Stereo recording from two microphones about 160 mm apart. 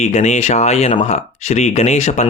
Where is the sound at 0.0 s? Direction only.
45° left (ahead or behind).